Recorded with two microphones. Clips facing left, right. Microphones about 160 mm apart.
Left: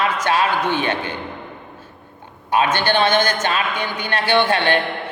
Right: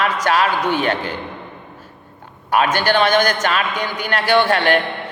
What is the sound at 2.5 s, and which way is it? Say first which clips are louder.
A man's voice: right 1 dB; 20° left (ahead or behind).